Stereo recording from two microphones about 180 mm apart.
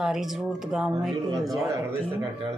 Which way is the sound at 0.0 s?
Centre (ahead or behind).